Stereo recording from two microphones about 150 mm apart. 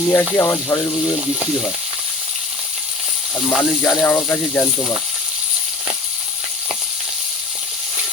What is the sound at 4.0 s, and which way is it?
Speech, 15° left (ahead or behind).